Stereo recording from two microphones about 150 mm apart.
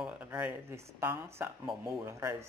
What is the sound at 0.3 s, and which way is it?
Speech, 10° right (ahead or behind).